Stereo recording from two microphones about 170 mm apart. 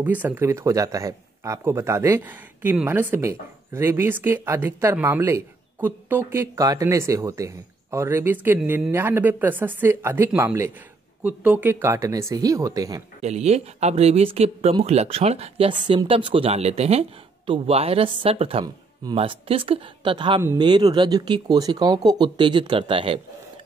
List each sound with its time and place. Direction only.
0.0 s speech: 10° right (ahead or behind)
13.2 s speech: 40° right (ahead or behind)